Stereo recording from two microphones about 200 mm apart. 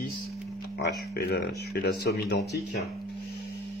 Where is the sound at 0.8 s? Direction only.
50° left (ahead or behind).